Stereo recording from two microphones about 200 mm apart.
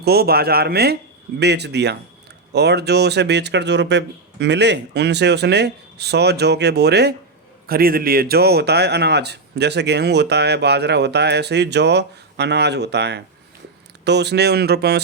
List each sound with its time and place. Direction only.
0.0 s speech: 50° right (ahead or behind)